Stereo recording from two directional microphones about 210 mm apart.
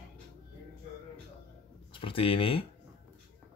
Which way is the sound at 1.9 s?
25° left (ahead or behind).